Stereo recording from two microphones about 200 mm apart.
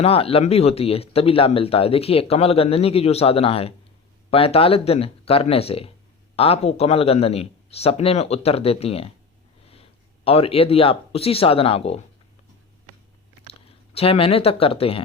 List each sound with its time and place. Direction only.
0.0 s speech: 30° left (ahead or behind)
10.2 s speech: 30° left (ahead or behind)
13.7 s speech: 30° left (ahead or behind)